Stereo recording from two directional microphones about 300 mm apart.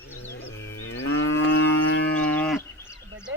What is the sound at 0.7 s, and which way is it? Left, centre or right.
Moo, left.